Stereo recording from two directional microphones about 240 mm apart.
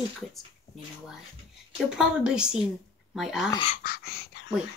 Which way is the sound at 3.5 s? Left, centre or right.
Left.